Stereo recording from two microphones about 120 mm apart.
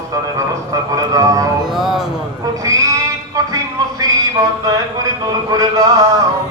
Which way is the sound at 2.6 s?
30° right (ahead or behind).